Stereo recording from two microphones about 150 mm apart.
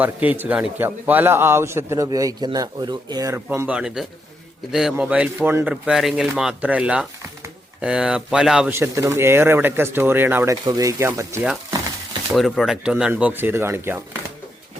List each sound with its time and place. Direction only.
0.0 s a man's voice: 10° right (ahead or behind)
8.7 s a man's voice: 15° right (ahead or behind)
12.3 s a man's voice: centre (ahead or behind); by 14.0 s 15° right (ahead or behind)